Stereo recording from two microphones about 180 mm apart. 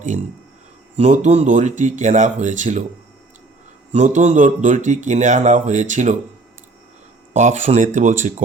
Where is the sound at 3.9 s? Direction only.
40° right (ahead or behind).